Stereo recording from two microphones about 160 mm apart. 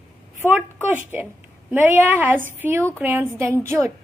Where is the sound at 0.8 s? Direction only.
10° right (ahead or behind).